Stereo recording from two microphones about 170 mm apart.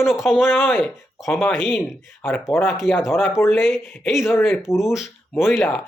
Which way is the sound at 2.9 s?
15° left (ahead or behind).